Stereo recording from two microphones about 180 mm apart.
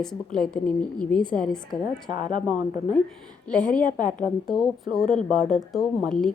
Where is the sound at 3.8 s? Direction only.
50° left (ahead or behind).